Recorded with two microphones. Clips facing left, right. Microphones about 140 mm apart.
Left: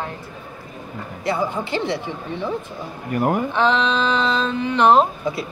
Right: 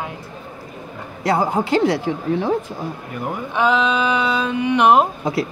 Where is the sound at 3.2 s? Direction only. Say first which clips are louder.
Left 7 dB; 60° left (ahead or behind).